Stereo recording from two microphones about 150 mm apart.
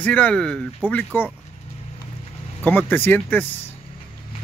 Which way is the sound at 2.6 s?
15° left (ahead or behind).